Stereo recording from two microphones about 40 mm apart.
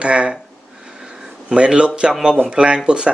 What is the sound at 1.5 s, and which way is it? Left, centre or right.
Speech, right.